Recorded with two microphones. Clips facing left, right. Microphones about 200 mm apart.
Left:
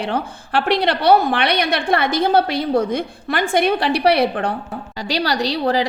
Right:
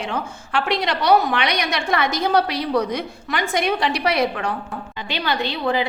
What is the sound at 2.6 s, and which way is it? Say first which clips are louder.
Speech: left 3 dB; 50° left (ahead or behind).